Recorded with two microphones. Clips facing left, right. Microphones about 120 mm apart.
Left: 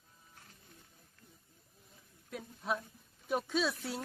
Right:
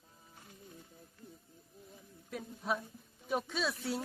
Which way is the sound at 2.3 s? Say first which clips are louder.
Right 1 dB; centre (ahead or behind).